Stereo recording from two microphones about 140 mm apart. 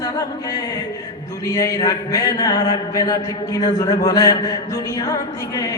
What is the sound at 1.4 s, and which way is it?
Speech, 25° left (ahead or behind).